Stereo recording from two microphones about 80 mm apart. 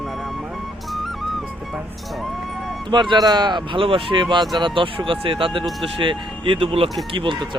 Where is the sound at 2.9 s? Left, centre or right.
Right.